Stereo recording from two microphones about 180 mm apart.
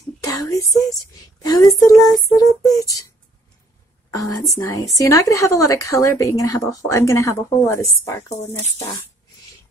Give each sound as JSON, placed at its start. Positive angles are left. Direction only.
{"t": 0.2, "sound": "a sound", "side_deg": 20}
{"t": 1.4, "sound": "speech", "side_deg": 20}
{"t": 2.0, "sound": "music", "side_deg": 0}
{"t": 2.6, "sound": "speech", "side_deg": 20}
{"t": 4.1, "sound": "a woman's voice", "side_deg": 20}